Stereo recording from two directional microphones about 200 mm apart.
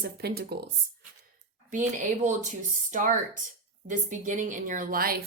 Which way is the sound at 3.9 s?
40° right (ahead or behind).